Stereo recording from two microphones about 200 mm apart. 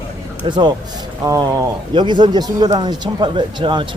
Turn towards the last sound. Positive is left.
turn(degrees=-25)  # may be behind; listen again after turning